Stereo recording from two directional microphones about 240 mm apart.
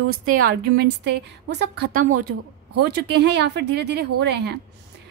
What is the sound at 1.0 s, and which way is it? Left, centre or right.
A woman's voice, right.